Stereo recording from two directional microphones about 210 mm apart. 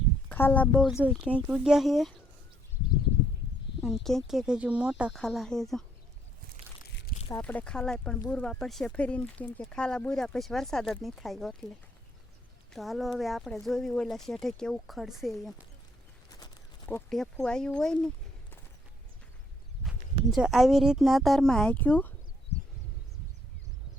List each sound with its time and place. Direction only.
0.3 s speech: 10° left (ahead or behind)
3.8 s speech: centre (ahead or behind)
7.2 s a sound: 25° left (ahead or behind)
7.4 s speech: 5° left (ahead or behind)
12.7 s speech: centre (ahead or behind)
16.3 s a sound: 15° left (ahead or behind)
17.4 s speech: 5° left (ahead or behind)
20.3 s speech: centre (ahead or behind)